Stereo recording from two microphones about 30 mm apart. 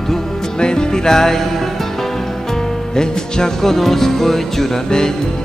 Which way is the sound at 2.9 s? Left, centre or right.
Left.